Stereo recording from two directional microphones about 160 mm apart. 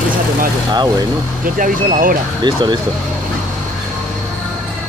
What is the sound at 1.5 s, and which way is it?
Speech, 60° right (ahead or behind).